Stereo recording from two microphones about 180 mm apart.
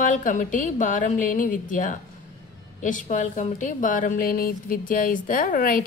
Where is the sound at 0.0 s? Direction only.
45° left (ahead or behind).